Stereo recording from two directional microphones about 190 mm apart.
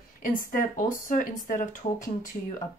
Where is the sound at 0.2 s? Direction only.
45° left (ahead or behind).